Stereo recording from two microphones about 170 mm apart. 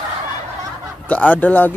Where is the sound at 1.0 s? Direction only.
10° left (ahead or behind).